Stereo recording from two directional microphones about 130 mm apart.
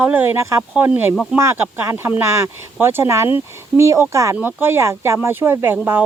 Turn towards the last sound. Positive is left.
turn(degrees=-15)  # may be behind; listen again after turning